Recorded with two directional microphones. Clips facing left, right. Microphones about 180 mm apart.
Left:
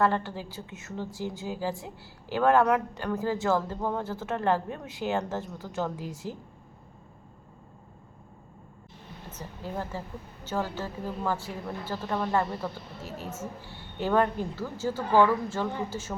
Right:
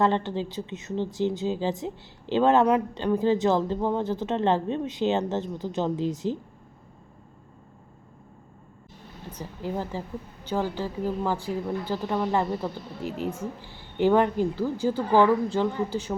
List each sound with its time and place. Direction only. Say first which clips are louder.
0.0 s speech: right 3 dB; 20° right (ahead or behind)
9.3 s a woman's voice: right 5 dB; 15° right (ahead or behind)